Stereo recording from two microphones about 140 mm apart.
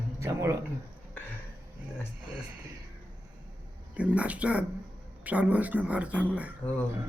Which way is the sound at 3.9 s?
10° right (ahead or behind).